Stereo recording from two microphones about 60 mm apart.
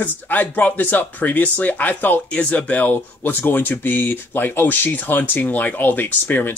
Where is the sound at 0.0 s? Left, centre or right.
Left.